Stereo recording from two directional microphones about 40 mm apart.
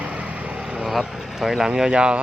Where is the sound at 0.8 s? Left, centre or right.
Centre.